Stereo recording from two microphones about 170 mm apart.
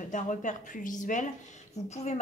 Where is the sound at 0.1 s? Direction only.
50° left (ahead or behind).